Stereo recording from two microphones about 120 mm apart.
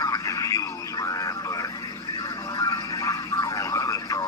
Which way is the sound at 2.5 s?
30° left (ahead or behind).